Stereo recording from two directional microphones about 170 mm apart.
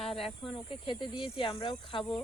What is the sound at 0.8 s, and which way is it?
Speech, 30° left (ahead or behind).